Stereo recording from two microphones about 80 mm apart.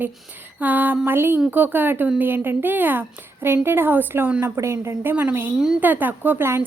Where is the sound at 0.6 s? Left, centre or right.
Right.